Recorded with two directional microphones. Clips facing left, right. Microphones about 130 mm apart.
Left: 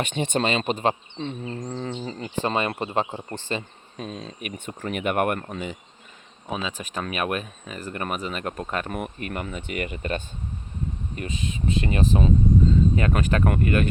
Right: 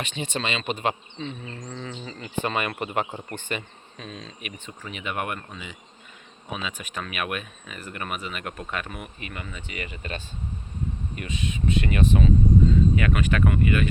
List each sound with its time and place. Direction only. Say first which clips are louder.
0.0 s speech: left 6 dB; 50° left (ahead or behind); by 3.1 s 25° left (ahead or behind)
3.3 s speech: left 2 dB; 35° left (ahead or behind)
6.5 s speech: left 3 dB; 35° left (ahead or behind); by 10.2 s 50° left (ahead or behind)
11.1 s speech: even; 35° left (ahead or behind)